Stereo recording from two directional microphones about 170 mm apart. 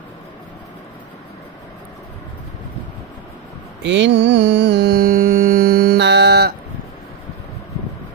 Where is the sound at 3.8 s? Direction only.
90° right.